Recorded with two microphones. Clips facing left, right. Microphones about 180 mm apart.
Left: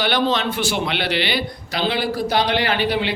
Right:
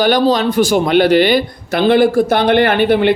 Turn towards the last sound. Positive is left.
turn(degrees=-55)  # may be behind; listen again after turning